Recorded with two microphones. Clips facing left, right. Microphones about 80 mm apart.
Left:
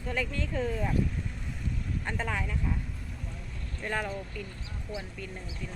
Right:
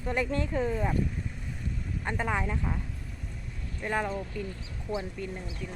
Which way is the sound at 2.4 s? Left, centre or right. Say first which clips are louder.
Right 3 dB; right.